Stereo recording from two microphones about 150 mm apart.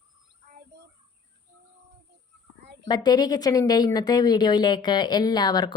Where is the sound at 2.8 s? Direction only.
25° left (ahead or behind).